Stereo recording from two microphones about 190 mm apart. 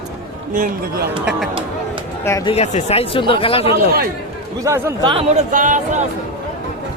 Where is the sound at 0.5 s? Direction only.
45° right (ahead or behind).